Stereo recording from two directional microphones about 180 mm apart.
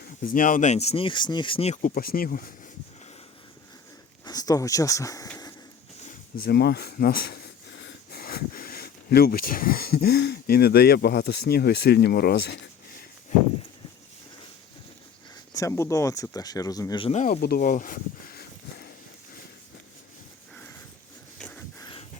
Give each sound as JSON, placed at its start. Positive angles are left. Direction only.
{"t": 0.3, "sound": "speech", "side_deg": 45}
{"t": 4.3, "sound": "speech", "side_deg": 20}
{"t": 6.1, "sound": "speech", "side_deg": 60}
{"t": 13.3, "sound": "horse", "side_deg": 45}
{"t": 15.5, "sound": "speech", "side_deg": 15}
{"t": 17.1, "sound": "speech", "side_deg": 40}
{"t": 17.4, "sound": "a sound", "side_deg": 55}
{"t": 21.3, "sound": "wheeze", "side_deg": 5}
{"t": 21.8, "sound": "pant", "side_deg": 25}